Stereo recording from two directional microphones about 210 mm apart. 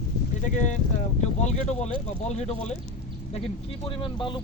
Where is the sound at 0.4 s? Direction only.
35° left (ahead or behind).